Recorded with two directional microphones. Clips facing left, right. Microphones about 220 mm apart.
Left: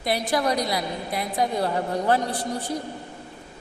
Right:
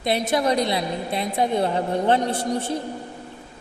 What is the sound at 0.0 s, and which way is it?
A woman's voice, 25° right (ahead or behind).